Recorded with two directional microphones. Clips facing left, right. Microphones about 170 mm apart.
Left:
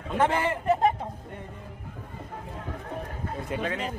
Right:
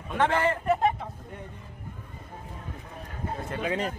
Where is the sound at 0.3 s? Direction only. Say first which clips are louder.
Right 1 dB; 15° left (ahead or behind).